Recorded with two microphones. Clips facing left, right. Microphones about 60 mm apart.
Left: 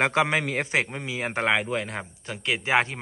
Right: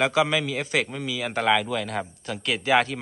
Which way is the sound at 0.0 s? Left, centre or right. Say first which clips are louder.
Right 1 dB; left.